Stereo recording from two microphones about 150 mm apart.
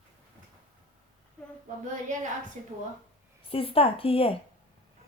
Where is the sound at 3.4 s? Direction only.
40° left (ahead or behind).